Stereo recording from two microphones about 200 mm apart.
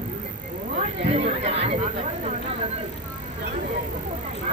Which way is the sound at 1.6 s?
35° right (ahead or behind).